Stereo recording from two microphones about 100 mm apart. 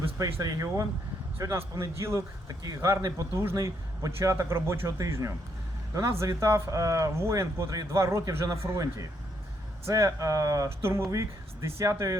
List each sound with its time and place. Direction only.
0.2 s a man's voice: 35° right (ahead or behind)